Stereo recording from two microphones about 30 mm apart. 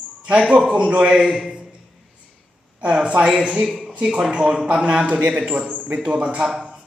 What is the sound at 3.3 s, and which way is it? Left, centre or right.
Speech, right.